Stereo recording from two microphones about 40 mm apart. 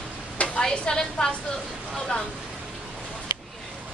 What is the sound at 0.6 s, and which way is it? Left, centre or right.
Speech, centre.